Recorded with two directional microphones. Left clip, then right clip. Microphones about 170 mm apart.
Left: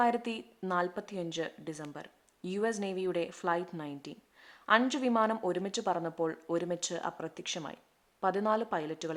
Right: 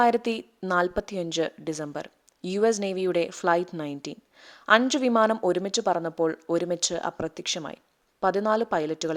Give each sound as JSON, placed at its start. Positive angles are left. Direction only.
{"t": 0.0, "sound": "a woman's voice", "side_deg": -30}